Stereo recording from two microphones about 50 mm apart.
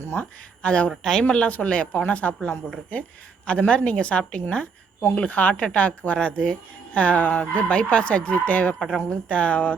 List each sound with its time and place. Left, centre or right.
0.0 s speech: left
0.6 s speech: left
0.9 s speech: centre
1.2 s speech: left